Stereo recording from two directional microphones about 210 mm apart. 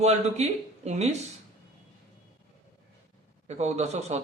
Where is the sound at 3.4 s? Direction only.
30° right (ahead or behind).